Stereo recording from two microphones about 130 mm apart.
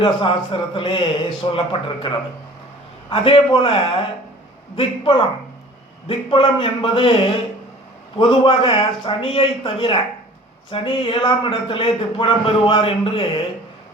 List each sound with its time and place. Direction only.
0.0 s speech: 40° left (ahead or behind)
8.2 s speech: 40° left (ahead or behind)